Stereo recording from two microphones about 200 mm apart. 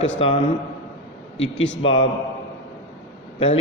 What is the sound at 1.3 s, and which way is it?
Speech, 70° left (ahead or behind).